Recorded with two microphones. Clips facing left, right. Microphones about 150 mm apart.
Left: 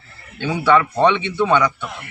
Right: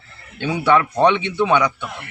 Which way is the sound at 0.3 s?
15° right (ahead or behind).